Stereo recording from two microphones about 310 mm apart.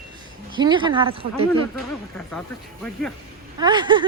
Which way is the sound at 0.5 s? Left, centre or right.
Centre.